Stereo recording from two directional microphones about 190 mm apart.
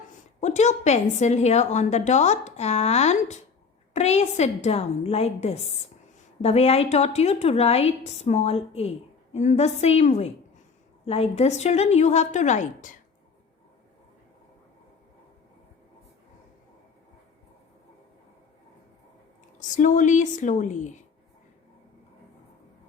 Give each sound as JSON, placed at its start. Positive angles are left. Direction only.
{"t": 0.3, "sound": "a woman's voice", "side_deg": 35}
{"t": 19.5, "sound": "a woman's voice", "side_deg": 40}